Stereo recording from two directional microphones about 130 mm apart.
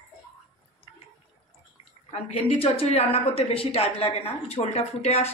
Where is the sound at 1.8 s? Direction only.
55° left (ahead or behind).